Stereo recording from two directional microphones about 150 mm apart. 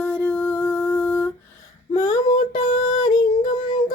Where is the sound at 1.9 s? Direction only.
25° left (ahead or behind).